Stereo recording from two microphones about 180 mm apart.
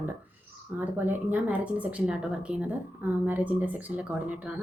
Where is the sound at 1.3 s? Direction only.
10° right (ahead or behind).